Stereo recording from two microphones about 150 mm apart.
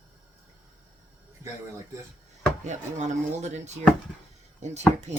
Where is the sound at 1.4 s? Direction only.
20° right (ahead or behind).